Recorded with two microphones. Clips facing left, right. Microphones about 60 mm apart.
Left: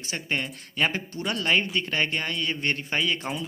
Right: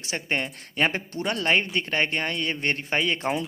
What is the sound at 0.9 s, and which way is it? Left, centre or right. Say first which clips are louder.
A man's voice: right 2 dB; right.